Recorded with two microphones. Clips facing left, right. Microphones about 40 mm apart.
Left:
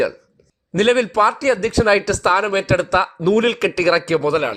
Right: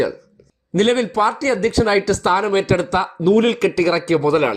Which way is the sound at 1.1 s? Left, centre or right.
Left.